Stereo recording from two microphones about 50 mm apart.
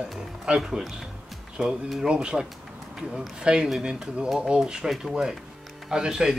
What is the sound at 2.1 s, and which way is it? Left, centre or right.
Speech, centre.